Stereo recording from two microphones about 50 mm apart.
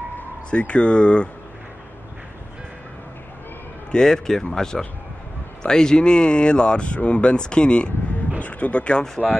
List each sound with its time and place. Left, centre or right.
0.5 s speech: left
3.9 s speech: centre
9.2 s speech: centre